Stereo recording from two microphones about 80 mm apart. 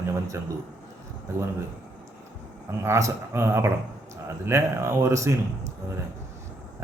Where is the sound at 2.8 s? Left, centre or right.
Right.